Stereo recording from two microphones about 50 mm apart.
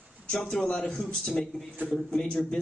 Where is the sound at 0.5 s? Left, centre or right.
Left.